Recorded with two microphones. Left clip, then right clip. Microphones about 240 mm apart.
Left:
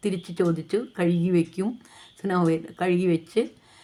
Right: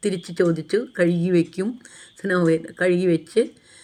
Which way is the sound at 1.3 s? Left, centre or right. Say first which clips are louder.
Right 4 dB; left.